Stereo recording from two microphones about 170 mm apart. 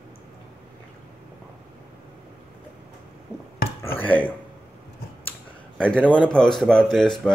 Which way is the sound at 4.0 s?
10° left (ahead or behind).